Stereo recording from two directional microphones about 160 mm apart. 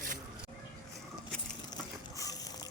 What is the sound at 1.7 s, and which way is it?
Water, 25° left (ahead or behind).